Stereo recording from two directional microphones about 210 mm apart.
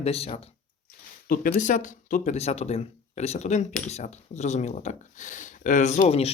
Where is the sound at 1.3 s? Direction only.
40° left (ahead or behind).